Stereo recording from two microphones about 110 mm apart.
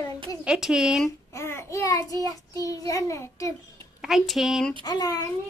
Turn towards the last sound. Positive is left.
turn(degrees=35)  # may be behind; listen again after turning